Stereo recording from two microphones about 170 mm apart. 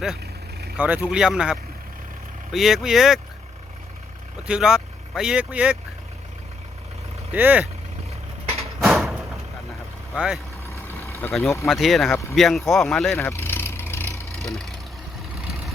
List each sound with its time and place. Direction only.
0.8 s speech: 10° right (ahead or behind)
4.4 s speech: 5° right (ahead or behind)
7.3 s speech: 10° right (ahead or behind)
8.5 s a sound: centre (ahead or behind)
10.2 s speech: 5° right (ahead or behind)
10.7 s vehicle: 15° left (ahead or behind)
11.4 s speech: 15° left (ahead or behind)
11.7 s speech: centre (ahead or behind)
13.1 s vehicle: 10° left (ahead or behind)
14.4 s speech: centre (ahead or behind)